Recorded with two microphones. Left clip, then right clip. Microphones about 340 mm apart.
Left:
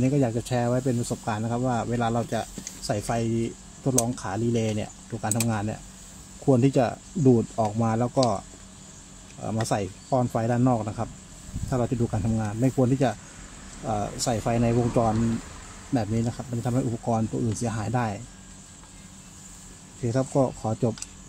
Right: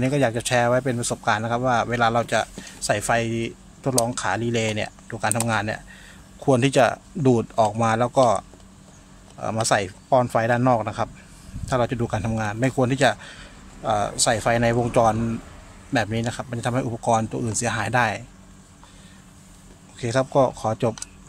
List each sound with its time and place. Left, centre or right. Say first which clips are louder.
0.2 s speech: right 6 dB; right
7.8 s speech: right 5 dB; right
9.4 s speech: right 6 dB; right
14.8 s speech: right 5 dB; right
16.3 s speech: right 5 dB; right
20.0 s speech: right 5 dB; right